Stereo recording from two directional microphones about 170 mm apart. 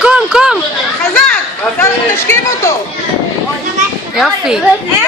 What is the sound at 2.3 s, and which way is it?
Speech, 20° left (ahead or behind).